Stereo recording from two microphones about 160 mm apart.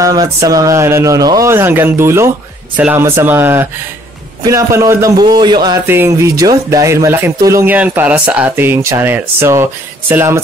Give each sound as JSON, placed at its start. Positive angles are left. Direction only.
{"t": 0.0, "sound": "speech", "side_deg": -20}
{"t": 5.9, "sound": "speech", "side_deg": -15}